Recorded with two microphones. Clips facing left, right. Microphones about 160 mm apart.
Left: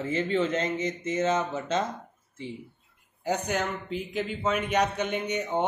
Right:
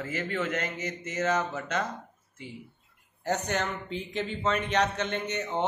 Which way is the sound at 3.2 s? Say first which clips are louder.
Left 1 dB; 10° left (ahead or behind).